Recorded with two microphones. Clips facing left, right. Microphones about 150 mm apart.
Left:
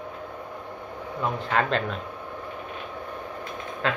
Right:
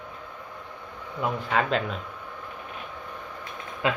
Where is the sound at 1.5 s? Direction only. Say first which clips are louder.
Left 1 dB; 5° right (ahead or behind).